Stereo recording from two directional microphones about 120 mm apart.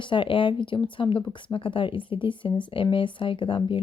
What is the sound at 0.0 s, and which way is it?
A woman's voice, 45° left (ahead or behind).